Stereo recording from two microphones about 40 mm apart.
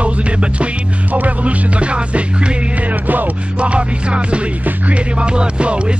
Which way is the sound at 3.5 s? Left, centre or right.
Right.